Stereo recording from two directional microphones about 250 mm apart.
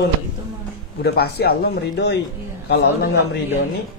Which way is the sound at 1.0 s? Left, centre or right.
Left.